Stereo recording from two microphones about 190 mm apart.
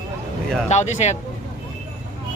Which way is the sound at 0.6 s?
35° left (ahead or behind).